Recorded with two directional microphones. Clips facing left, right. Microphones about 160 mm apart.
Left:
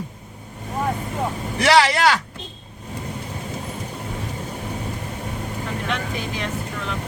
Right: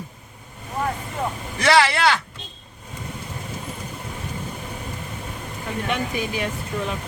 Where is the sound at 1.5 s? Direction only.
35° left (ahead or behind).